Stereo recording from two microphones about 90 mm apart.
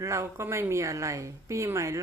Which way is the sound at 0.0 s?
30° right (ahead or behind).